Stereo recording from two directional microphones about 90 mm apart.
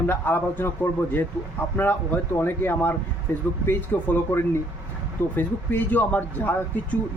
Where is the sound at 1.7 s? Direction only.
20° left (ahead or behind).